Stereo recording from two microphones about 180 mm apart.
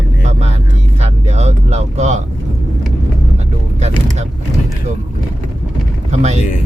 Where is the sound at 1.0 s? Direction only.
35° right (ahead or behind).